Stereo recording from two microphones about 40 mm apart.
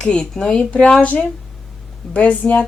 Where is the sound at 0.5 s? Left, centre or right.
Left.